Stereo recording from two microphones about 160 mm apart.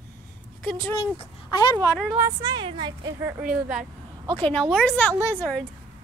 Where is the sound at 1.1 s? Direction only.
25° left (ahead or behind).